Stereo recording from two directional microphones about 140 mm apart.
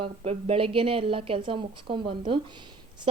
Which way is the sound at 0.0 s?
45° right (ahead or behind).